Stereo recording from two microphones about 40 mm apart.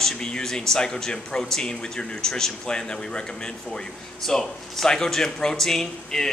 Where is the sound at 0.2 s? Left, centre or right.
Centre.